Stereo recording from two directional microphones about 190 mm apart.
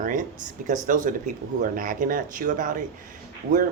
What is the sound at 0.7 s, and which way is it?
Speech, 45° right (ahead or behind).